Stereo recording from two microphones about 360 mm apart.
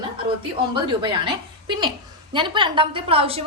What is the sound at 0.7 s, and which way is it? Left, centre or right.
A woman's voice, centre.